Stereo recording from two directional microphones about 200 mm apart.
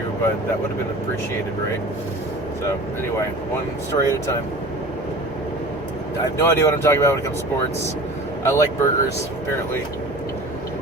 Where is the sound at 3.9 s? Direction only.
30° left (ahead or behind).